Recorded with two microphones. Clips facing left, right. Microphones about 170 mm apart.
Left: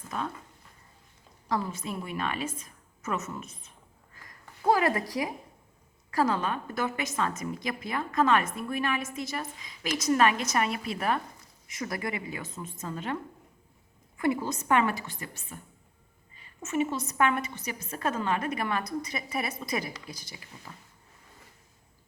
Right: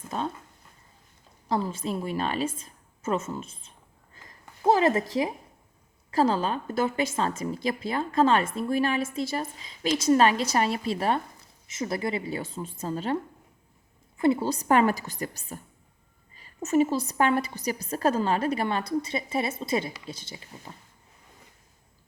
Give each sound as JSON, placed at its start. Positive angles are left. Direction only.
{"t": 0.1, "sound": "speech", "side_deg": -30}
{"t": 1.5, "sound": "a woman's voice", "side_deg": -30}
{"t": 4.1, "sound": "a sound", "side_deg": -25}
{"t": 6.1, "sound": "a woman's voice", "side_deg": -30}
{"t": 14.2, "sound": "a woman's voice", "side_deg": -30}